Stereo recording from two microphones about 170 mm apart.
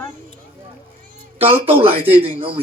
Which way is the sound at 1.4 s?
35° right (ahead or behind).